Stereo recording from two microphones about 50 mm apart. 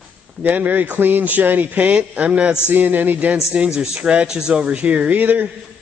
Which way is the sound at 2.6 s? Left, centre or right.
Right.